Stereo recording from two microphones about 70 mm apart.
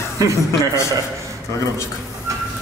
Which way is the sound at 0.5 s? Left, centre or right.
Left.